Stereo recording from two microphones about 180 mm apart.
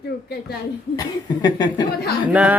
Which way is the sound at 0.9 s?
20° left (ahead or behind).